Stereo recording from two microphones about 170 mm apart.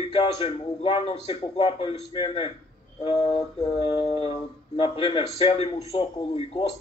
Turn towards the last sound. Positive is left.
turn(degrees=35)  # may be behind; listen again after turning